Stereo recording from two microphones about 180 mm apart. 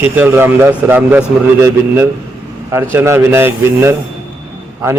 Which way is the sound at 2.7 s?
15° right (ahead or behind).